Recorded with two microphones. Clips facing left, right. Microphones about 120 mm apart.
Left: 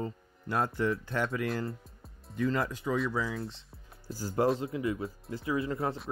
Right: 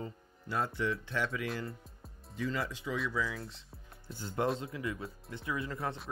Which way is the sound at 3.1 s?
30° left (ahead or behind).